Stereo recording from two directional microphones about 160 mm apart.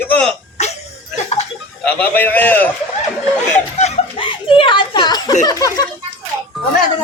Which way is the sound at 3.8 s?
40° left (ahead or behind).